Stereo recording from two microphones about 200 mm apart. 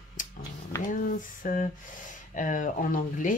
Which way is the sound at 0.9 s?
40° left (ahead or behind).